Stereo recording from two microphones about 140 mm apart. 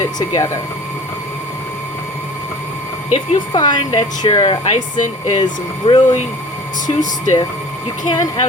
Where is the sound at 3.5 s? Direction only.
30° left (ahead or behind).